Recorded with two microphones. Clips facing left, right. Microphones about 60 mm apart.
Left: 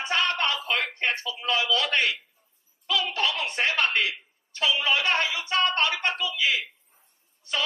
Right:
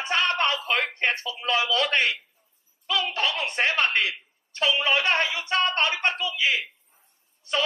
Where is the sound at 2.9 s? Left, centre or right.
Right.